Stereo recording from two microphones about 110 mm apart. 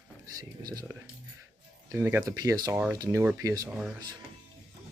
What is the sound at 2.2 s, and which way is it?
Speech, 35° right (ahead or behind).